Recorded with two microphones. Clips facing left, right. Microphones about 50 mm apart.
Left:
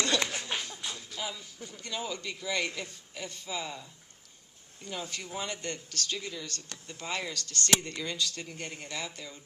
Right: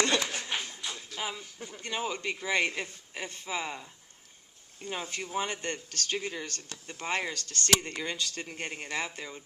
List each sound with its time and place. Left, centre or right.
0.5 s music: right
0.9 s speech: right